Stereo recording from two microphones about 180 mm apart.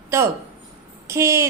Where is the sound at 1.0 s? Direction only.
15° right (ahead or behind).